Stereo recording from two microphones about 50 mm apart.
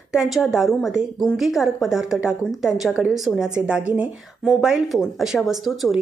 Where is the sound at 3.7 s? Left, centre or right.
Right.